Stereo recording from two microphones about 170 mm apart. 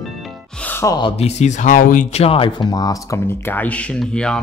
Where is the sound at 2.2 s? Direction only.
30° left (ahead or behind).